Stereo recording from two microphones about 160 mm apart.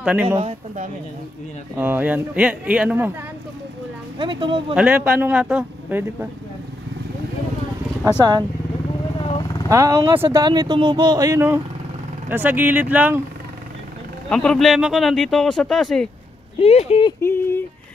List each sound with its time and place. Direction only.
0.0 s a man's voice: 10° right (ahead or behind)
0.4 s speech: 40° right (ahead or behind)
1.8 s a man's voice: 10° right (ahead or behind)
4.2 s speech: 30° right (ahead or behind)
4.7 s a man's voice: 10° right (ahead or behind)
8.2 s speech: 25° right (ahead or behind)
9.3 s vehicle: 25° left (ahead or behind)
9.7 s speech: 20° right (ahead or behind)
10.1 s a man's voice: 15° right (ahead or behind)
10.4 s a man's voice: 25° right (ahead or behind); by 13.2 s 10° right (ahead or behind)
14.3 s speech: 5° left (ahead or behind)
16.5 s speech: 40° left (ahead or behind)
17.2 s a sound: 15° left (ahead or behind)